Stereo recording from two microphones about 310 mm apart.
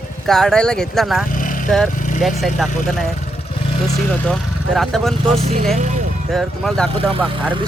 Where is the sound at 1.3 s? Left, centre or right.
Left.